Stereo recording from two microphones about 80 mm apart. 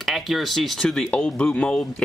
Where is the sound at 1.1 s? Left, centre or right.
Centre.